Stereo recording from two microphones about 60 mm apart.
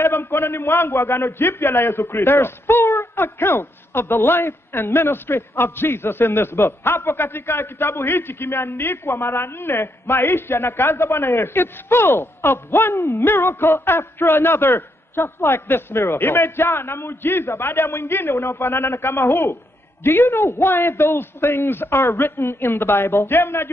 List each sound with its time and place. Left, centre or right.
0.0 s a man's voice: left